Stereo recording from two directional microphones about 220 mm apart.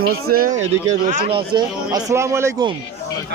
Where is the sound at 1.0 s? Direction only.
25° right (ahead or behind).